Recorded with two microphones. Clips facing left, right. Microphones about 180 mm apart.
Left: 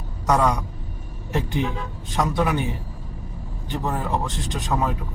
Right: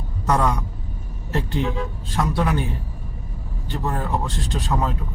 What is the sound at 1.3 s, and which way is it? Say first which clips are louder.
Speech: right 1 dB; 15° left (ahead or behind).